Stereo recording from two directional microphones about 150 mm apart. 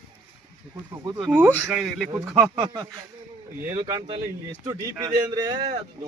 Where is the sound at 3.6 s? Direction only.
20° right (ahead or behind).